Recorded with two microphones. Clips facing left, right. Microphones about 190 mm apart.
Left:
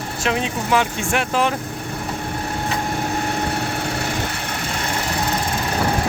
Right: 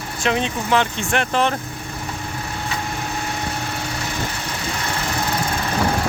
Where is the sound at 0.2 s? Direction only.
5° left (ahead or behind).